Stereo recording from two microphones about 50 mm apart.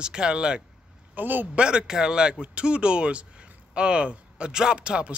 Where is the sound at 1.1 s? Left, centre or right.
Right.